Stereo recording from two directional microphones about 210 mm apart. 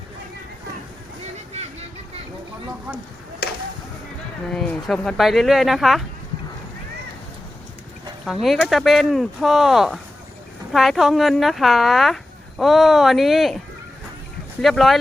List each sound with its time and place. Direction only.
1.5 s vehicle: 30° right (ahead or behind)
4.5 s speech: 5° left (ahead or behind)
8.2 s speech: centre (ahead or behind)
14.6 s speech: centre (ahead or behind)